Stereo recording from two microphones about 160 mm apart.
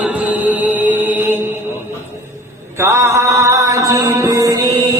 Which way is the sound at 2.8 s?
20° right (ahead or behind).